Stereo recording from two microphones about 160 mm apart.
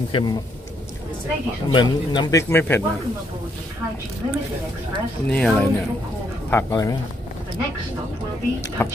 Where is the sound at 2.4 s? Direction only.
15° left (ahead or behind).